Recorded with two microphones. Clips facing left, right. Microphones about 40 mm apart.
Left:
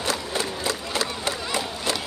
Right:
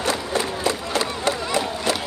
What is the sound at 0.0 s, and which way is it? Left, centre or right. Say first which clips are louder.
Crowd: right 4 dB; right.